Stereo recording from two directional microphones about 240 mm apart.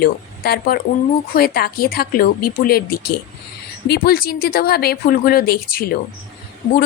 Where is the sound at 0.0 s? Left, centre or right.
Left.